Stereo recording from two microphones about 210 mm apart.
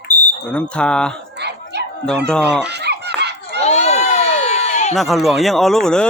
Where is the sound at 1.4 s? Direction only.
55° right (ahead or behind).